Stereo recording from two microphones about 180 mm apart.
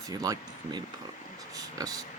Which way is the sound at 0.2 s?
20° right (ahead or behind).